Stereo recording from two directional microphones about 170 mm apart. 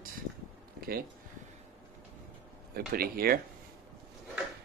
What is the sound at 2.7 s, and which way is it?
Speech, 60° right (ahead or behind).